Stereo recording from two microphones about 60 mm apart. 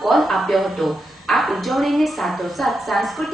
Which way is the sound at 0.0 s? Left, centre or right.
Centre.